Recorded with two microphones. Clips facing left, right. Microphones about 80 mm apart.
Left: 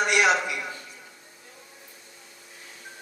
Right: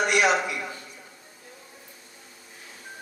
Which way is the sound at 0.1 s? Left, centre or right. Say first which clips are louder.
Even; right.